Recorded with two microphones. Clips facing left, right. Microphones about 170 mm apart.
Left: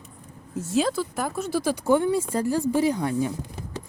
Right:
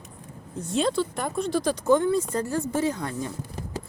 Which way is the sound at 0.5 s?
5° left (ahead or behind).